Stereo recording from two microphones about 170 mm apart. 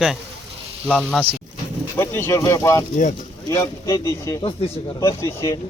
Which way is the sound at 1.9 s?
15° left (ahead or behind).